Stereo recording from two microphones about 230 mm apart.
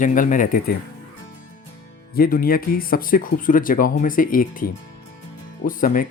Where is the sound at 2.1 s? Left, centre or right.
Left.